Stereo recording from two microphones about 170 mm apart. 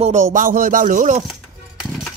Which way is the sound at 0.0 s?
45° right (ahead or behind).